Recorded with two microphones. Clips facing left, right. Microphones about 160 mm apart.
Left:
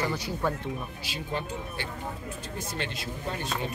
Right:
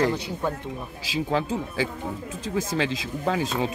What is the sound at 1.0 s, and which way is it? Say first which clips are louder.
Speech: right 11 dB; 90° right.